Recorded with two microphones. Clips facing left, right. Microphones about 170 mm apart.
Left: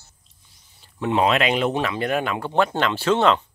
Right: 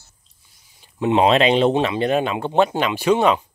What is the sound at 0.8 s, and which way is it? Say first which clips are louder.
Speech: right 4 dB; 20° right (ahead or behind).